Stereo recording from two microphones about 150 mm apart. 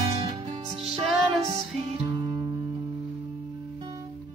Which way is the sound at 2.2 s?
35° right (ahead or behind).